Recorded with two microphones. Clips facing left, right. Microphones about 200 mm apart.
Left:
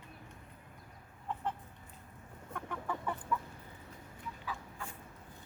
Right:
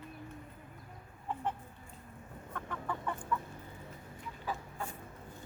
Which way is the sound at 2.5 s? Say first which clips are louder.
Even; 10° left (ahead or behind).